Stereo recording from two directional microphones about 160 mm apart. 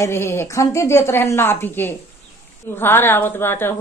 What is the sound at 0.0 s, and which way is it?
A woman's voice, 15° left (ahead or behind).